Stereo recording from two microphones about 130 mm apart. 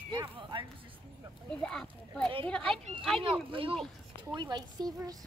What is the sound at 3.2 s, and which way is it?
Speech, 45° right (ahead or behind).